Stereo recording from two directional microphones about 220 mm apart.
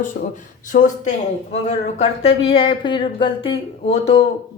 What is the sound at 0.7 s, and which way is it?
A woman's voice, 35° left (ahead or behind).